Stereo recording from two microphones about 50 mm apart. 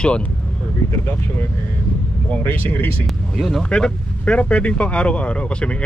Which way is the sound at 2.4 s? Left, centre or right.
Left.